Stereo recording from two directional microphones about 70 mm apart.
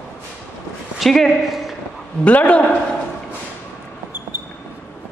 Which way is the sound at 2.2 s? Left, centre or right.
Centre.